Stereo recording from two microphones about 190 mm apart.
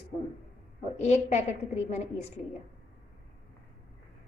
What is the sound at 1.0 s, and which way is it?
A woman's voice, 35° left (ahead or behind).